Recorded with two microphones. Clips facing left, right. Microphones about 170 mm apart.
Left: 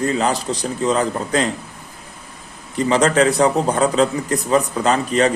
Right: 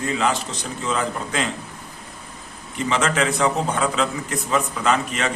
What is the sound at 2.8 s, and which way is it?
A man's voice, 35° left (ahead or behind).